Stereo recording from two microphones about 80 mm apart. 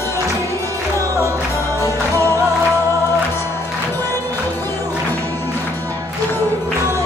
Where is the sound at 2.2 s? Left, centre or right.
Right.